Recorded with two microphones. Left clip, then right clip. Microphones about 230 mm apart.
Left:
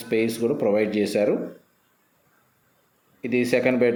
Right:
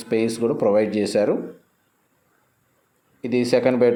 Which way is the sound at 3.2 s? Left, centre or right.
Centre.